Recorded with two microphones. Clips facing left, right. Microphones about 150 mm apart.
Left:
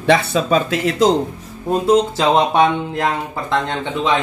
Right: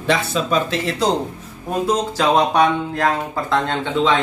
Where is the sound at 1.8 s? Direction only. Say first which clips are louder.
Left 4 dB; 25° left (ahead or behind).